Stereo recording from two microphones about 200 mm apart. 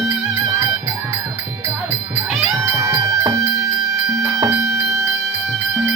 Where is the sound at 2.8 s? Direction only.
15° right (ahead or behind).